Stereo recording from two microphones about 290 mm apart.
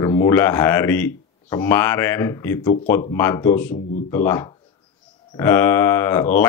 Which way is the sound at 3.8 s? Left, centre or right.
Left.